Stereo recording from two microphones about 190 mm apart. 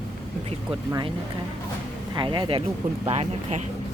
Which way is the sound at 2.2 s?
25° right (ahead or behind).